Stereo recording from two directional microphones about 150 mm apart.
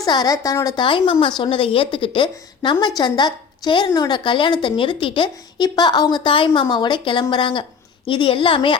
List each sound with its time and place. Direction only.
0.0 s a woman's voice: 25° left (ahead or behind)
0.8 s a woman's voice: 35° left (ahead or behind)